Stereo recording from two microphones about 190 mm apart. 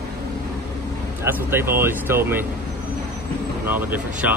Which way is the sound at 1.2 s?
10° right (ahead or behind).